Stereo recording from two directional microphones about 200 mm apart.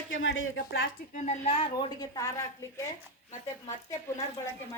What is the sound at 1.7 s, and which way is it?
Speech, 20° left (ahead or behind).